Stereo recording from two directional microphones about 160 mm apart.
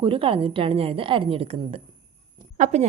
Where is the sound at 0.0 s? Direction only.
35° right (ahead or behind).